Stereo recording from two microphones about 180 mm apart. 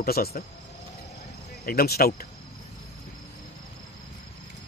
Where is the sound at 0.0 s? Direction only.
55° left (ahead or behind).